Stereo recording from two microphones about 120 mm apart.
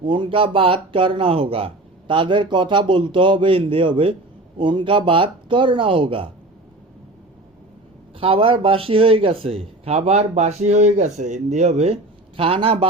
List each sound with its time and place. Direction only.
0.0 s speech: 45° right (ahead or behind)
8.2 s a man's voice: 50° right (ahead or behind)
12.4 s speech: 50° right (ahead or behind)